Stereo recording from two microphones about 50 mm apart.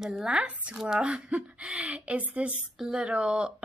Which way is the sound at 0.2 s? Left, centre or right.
Centre.